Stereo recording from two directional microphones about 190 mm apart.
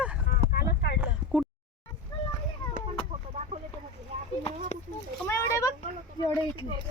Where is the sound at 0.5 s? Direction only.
60° left (ahead or behind).